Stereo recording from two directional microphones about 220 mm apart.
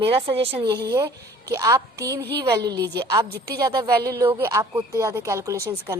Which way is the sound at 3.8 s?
45° right (ahead or behind).